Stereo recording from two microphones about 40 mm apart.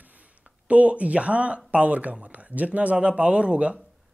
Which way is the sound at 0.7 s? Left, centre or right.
Right.